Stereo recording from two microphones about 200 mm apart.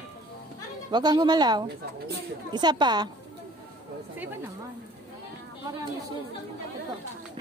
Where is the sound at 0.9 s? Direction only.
20° right (ahead or behind).